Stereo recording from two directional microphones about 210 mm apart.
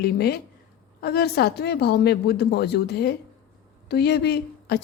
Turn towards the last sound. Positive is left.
turn(degrees=50)  # may be behind; listen again after turning